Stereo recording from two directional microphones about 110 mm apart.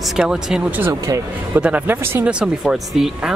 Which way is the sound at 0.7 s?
25° right (ahead or behind).